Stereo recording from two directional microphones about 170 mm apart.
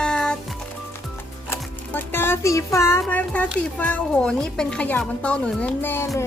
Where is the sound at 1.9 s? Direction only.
10° left (ahead or behind).